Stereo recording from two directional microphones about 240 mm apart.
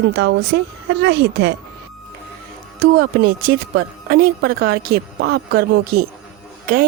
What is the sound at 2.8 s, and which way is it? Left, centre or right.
Speech, right.